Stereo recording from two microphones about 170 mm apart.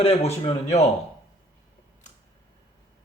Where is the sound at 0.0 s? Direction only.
35° left (ahead or behind).